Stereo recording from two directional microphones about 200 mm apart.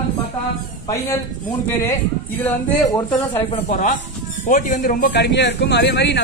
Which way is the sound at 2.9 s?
20° left (ahead or behind).